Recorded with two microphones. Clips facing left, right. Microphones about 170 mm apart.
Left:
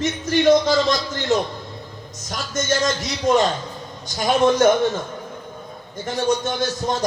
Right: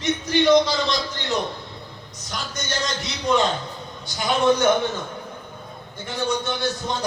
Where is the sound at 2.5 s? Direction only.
45° left (ahead or behind).